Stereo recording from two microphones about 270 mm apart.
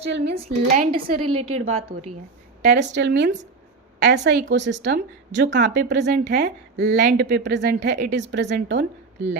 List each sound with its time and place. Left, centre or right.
0.0 s a woman's voice: right
0.3 s speech: right
0.9 s a woman's voice: right
1.3 s a woman's voice: right
1.5 s speech: right
2.6 s a woman's voice: right